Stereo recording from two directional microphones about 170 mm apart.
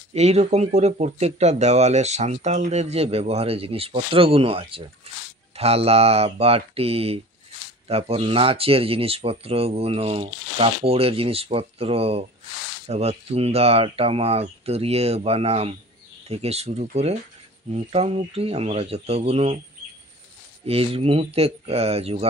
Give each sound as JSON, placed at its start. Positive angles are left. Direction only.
{"t": 0.1, "sound": "speech", "side_deg": -40}
{"t": 20.6, "sound": "speech", "side_deg": -35}